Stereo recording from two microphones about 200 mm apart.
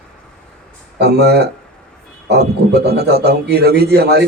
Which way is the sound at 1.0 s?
55° right (ahead or behind).